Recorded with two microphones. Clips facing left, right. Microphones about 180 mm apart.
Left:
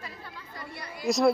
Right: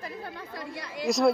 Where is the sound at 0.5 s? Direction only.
90° right.